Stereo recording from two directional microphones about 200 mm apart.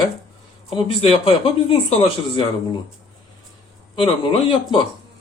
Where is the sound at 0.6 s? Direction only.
25° left (ahead or behind).